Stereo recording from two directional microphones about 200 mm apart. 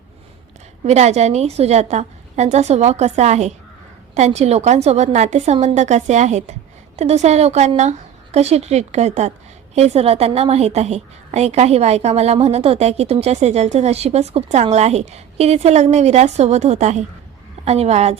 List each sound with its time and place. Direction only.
0.9 s a woman's voice: 35° right (ahead or behind)